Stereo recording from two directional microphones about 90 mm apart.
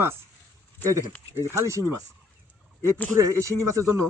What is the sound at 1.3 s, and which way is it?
Speech, 30° right (ahead or behind).